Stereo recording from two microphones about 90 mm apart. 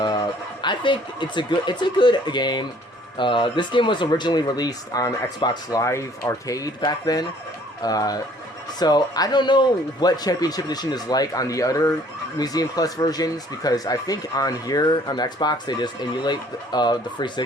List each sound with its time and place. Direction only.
0.6 s speech: 60° left (ahead or behind)